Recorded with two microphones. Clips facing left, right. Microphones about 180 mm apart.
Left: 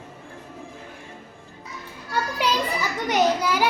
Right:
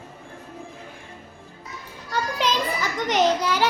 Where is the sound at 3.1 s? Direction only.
10° left (ahead or behind).